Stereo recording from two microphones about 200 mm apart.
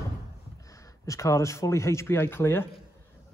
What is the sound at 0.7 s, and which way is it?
Speech, 15° left (ahead or behind).